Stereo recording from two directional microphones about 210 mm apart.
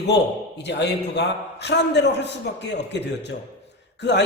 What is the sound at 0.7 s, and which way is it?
A man's voice, 55° left (ahead or behind).